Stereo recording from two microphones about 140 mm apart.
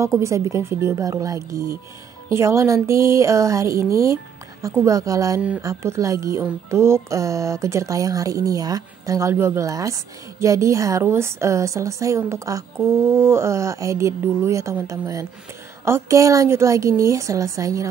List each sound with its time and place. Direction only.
0.2 s speech: 20° right (ahead or behind)